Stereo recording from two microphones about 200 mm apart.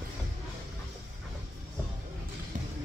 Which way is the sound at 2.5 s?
40° right (ahead or behind).